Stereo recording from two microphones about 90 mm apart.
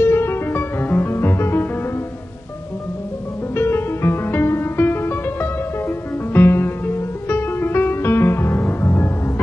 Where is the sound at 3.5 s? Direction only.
25° left (ahead or behind).